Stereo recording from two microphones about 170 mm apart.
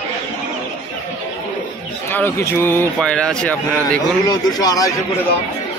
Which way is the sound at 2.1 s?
10° left (ahead or behind).